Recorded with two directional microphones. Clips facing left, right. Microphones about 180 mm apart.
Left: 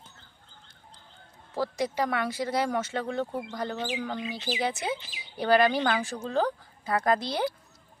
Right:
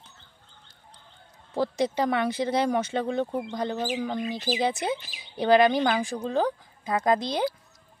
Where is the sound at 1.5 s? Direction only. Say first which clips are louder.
Right 4 dB; 20° right (ahead or behind).